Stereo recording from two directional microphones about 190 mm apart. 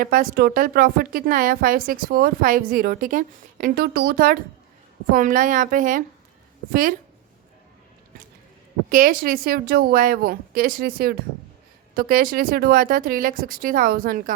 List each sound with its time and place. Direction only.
0.0 s a woman's voice: 45° right (ahead or behind)
8.9 s a woman's voice: 45° right (ahead or behind)